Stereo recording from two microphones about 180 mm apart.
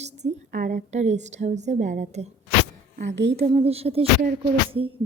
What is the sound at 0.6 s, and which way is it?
A woman's voice, 40° right (ahead or behind).